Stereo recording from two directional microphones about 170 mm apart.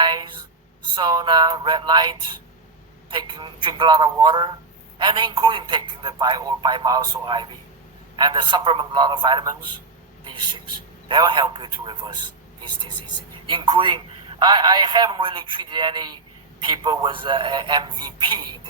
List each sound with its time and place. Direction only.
0.0 s writing: 25° right (ahead or behind)
0.9 s a man's voice: 25° right (ahead or behind)
13.5 s a man's voice: 30° right (ahead or behind)